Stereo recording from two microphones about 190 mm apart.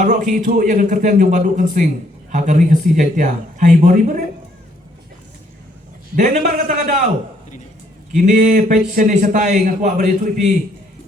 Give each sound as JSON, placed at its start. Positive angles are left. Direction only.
{"t": 0.0, "sound": "a man's voice", "side_deg": -40}
{"t": 6.1, "sound": "a man's voice", "side_deg": -40}
{"t": 8.1, "sound": "a man's voice", "side_deg": -40}